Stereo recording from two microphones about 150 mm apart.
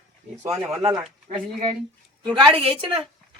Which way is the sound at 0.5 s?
5° right (ahead or behind).